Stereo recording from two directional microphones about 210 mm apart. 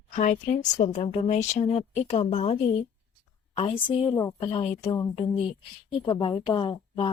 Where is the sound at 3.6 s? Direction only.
25° left (ahead or behind).